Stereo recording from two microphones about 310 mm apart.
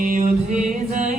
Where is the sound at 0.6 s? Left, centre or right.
Right.